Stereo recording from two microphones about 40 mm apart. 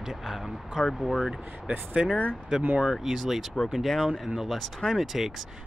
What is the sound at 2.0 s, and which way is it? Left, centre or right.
Speech, right.